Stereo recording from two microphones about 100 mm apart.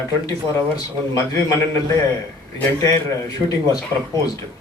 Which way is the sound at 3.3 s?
40° left (ahead or behind).